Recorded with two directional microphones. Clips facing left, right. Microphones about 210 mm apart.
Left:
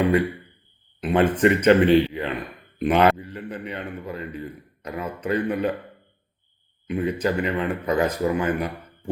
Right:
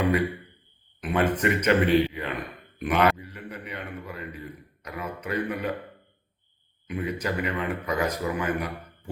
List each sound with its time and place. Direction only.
1.0 s speech: 30° left (ahead or behind)
6.8 s speech: 30° left (ahead or behind)